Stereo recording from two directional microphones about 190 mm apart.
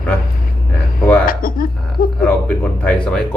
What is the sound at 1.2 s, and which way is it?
Speech, 50° left (ahead or behind).